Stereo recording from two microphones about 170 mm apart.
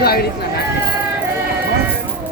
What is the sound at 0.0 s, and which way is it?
Run, 65° left (ahead or behind).